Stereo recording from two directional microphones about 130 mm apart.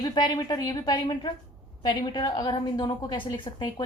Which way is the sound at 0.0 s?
35° left (ahead or behind).